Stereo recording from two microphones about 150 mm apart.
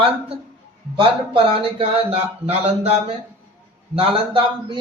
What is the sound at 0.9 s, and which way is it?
Speech, 35° right (ahead or behind).